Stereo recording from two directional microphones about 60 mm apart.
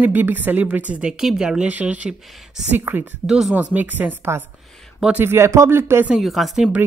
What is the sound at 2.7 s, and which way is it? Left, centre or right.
Speech, right.